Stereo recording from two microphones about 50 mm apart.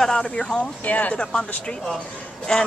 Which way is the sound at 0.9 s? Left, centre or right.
Left.